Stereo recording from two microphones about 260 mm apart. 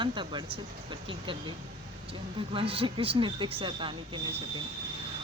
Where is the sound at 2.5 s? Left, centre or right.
Right.